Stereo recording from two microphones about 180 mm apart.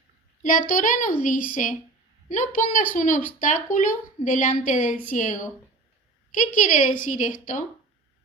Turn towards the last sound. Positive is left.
turn(degrees=50)  # may be behind; listen again after turning